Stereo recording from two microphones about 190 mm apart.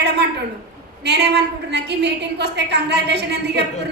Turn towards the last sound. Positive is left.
turn(degrees=-60)  # may be behind; listen again after turning